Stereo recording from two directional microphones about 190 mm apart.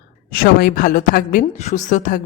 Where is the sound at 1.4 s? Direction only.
35° left (ahead or behind).